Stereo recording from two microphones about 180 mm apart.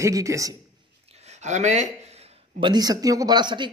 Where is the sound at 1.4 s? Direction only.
40° right (ahead or behind).